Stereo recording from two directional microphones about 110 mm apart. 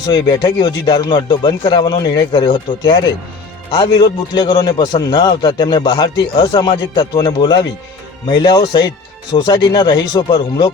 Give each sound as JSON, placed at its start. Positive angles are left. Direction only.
{"t": 0.0, "sound": "a man's voice", "side_deg": 40}